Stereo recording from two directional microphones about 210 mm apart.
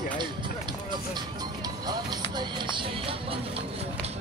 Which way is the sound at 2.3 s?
20° right (ahead or behind).